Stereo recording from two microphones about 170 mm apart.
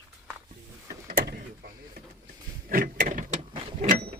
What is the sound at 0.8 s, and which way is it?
Vehicle, 60° right (ahead or behind).